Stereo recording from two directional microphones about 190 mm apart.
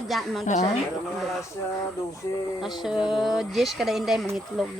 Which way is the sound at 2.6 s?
5° right (ahead or behind).